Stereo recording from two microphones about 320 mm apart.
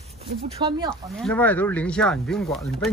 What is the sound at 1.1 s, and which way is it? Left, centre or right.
Speech, centre.